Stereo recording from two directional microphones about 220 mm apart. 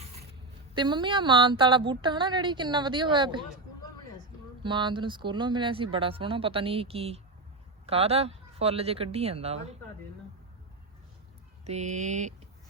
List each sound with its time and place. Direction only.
0.0 s zipper: 30° right (ahead or behind)
0.7 s a woman's voice: 20° right (ahead or behind)
4.6 s a woman's voice: 20° right (ahead or behind)
11.6 s mantra: 30° right (ahead or behind)